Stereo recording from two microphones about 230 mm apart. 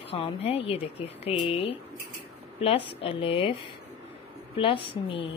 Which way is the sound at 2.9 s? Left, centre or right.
Left.